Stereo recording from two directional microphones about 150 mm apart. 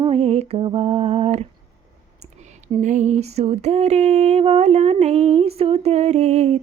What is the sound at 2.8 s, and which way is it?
Female singing, 50° right (ahead or behind).